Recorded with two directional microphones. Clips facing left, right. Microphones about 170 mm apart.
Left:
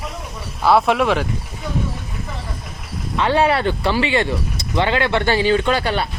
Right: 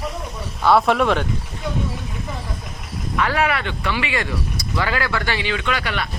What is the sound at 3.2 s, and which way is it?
Speech, 25° left (ahead or behind).